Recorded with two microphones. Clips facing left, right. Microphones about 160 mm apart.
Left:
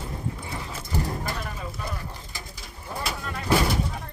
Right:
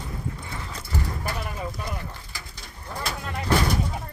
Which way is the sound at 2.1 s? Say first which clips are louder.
Left 1 dB; 20° left (ahead or behind).